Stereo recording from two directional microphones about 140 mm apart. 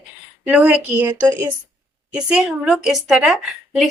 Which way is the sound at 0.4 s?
10° right (ahead or behind).